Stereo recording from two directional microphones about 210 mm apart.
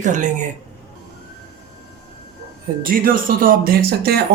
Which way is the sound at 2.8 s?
40° right (ahead or behind).